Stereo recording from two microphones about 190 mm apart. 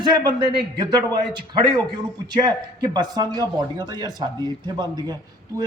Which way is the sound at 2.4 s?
20° right (ahead or behind).